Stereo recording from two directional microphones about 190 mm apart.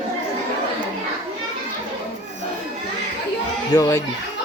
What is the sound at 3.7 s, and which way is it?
Speech, 20° left (ahead or behind).